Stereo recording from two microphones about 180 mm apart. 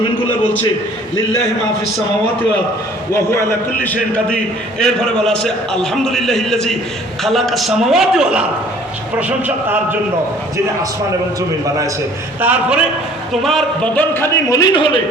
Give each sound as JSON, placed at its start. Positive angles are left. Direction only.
{"t": 3.1, "sound": "a man's voice", "side_deg": 15}
{"t": 4.8, "sound": "a man's voice", "side_deg": 5}
{"t": 12.4, "sound": "a man's voice", "side_deg": -10}